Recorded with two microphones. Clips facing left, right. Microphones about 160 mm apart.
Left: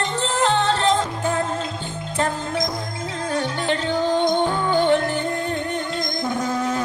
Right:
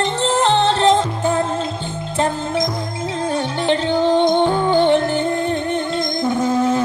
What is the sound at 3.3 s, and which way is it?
Music, 25° right (ahead or behind).